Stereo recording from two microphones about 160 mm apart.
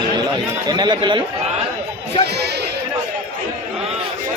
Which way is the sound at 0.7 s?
25° right (ahead or behind).